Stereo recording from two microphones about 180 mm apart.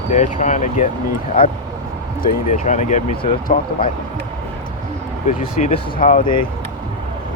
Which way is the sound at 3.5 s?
55° left (ahead or behind).